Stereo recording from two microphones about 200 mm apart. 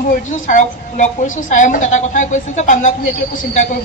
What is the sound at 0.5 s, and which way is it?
A woman's voice, 40° left (ahead or behind).